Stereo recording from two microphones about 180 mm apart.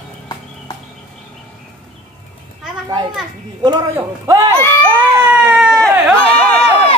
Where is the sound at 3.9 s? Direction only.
15° right (ahead or behind).